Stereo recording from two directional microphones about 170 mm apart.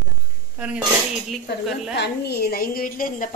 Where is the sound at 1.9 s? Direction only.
80° left; by 3.3 s 55° left (ahead or behind).